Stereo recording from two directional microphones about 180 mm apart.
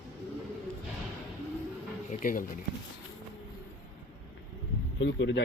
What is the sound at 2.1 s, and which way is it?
Speech, 45° left (ahead or behind).